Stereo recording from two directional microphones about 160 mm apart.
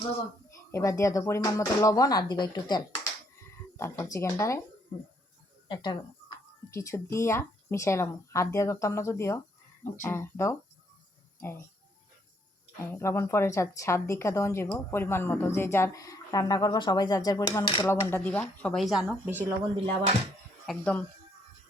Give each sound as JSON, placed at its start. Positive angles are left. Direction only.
{"t": 0.7, "sound": "a woman's voice", "side_deg": 20}
{"t": 5.6, "sound": "speech", "side_deg": 30}
{"t": 6.7, "sound": "a woman's voice", "side_deg": 15}
{"t": 12.9, "sound": "a woman's voice", "side_deg": 15}
{"t": 17.7, "sound": "speech", "side_deg": 30}
{"t": 18.1, "sound": "speech", "side_deg": 10}
{"t": 20.7, "sound": "a woman's voice", "side_deg": 5}